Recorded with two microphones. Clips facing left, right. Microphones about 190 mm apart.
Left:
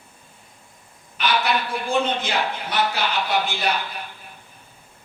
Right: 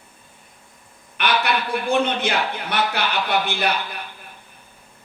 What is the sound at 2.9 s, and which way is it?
Speech, 60° right (ahead or behind).